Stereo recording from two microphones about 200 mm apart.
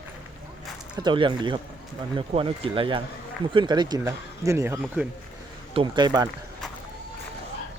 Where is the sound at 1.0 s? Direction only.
25° right (ahead or behind); by 5.1 s 5° right (ahead or behind).